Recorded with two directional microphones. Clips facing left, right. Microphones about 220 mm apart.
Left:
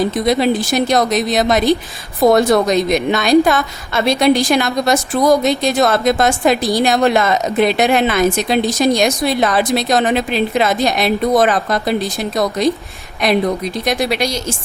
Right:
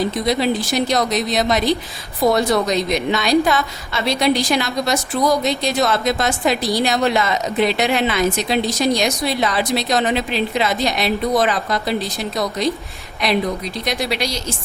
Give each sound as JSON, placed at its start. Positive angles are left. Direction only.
{"t": 0.3, "sound": "a woman's voice", "side_deg": 50}
{"t": 13.2, "sound": "a woman's voice", "side_deg": 50}